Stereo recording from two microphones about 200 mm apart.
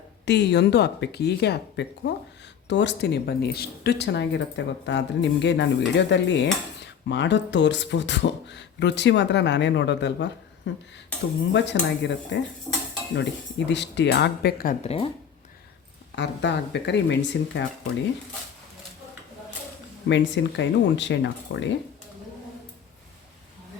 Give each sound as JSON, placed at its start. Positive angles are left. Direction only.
{"t": 0.3, "sound": "speech", "side_deg": 60}
{"t": 12.7, "sound": "dishes", "side_deg": 10}
{"t": 13.7, "sound": "speech", "side_deg": 60}
{"t": 14.8, "sound": "speech", "side_deg": 30}
{"t": 16.1, "sound": "speech", "side_deg": 60}
{"t": 20.1, "sound": "speech", "side_deg": 65}